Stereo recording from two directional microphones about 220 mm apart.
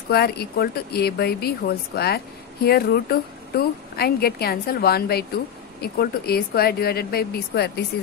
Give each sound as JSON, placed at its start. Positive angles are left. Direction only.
{"t": 0.1, "sound": "speech", "side_deg": 45}